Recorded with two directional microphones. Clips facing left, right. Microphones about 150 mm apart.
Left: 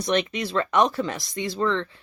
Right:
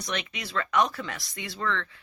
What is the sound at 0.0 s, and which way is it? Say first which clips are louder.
Speech: left 10 dB; 30° left (ahead or behind).